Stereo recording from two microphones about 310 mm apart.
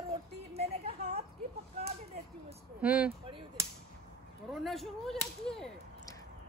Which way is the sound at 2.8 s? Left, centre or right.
Centre.